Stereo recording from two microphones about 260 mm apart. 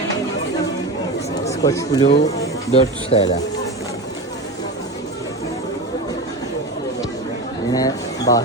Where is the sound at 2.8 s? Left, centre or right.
Centre.